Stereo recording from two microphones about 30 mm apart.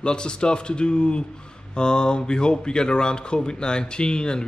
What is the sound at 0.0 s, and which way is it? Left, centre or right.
A man's voice, left.